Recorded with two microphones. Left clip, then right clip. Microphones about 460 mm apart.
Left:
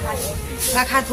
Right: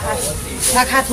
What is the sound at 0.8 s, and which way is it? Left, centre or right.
Speech, left.